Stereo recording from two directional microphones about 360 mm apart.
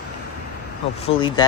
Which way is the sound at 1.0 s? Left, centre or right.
Centre.